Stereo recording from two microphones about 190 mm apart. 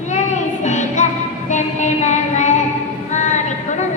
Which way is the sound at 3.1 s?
40° left (ahead or behind).